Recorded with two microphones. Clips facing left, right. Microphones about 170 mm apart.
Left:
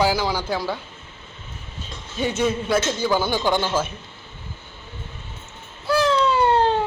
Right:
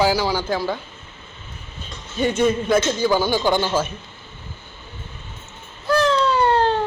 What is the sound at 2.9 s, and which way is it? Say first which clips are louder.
Speech: right 3 dB; 10° right (ahead or behind).